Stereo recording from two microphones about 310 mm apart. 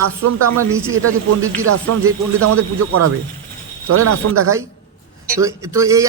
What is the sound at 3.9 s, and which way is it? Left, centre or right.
Speech, right.